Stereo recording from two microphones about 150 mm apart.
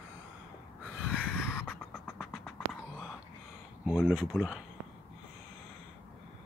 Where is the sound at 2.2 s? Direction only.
Centre (ahead or behind).